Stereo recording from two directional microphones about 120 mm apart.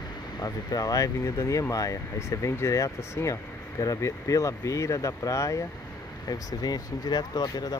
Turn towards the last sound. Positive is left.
turn(degrees=35)  # may be behind; listen again after turning